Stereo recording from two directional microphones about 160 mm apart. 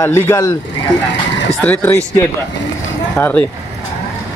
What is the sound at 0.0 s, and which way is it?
Speech, 20° left (ahead or behind).